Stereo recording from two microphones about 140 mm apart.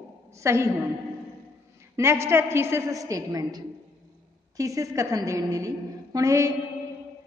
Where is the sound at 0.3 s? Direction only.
20° right (ahead or behind).